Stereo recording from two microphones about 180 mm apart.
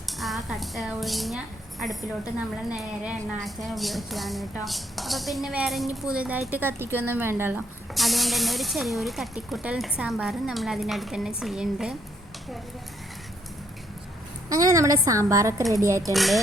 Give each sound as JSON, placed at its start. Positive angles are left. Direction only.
{"t": 0.2, "sound": "a woman's voice", "side_deg": 0}
{"t": 7.9, "sound": "speech", "side_deg": 0}
{"t": 14.5, "sound": "a woman's voice", "side_deg": -20}
{"t": 16.1, "sound": "speech", "side_deg": 0}